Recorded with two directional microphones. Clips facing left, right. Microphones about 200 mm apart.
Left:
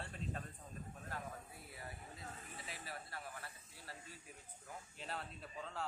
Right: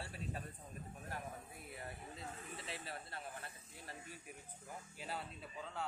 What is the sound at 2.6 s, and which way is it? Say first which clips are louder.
Snake: right 1 dB; 25° right (ahead or behind).